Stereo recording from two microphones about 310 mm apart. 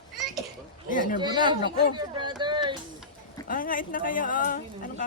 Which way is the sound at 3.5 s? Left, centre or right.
Left.